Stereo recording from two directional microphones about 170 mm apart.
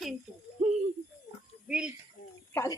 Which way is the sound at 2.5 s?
10° left (ahead or behind).